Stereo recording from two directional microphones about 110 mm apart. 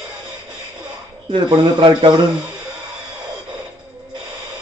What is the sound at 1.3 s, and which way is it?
Speech, 50° right (ahead or behind).